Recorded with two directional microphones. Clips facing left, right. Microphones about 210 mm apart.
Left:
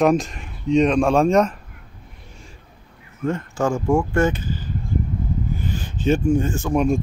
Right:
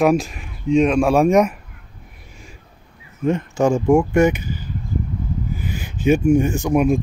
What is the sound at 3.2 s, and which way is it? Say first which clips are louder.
Speech: right 4 dB; 15° right (ahead or behind).